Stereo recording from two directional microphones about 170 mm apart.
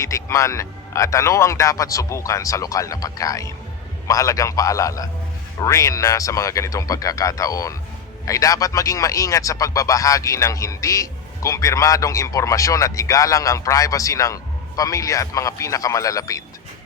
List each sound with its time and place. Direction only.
0.0 s speech: 20° left (ahead or behind)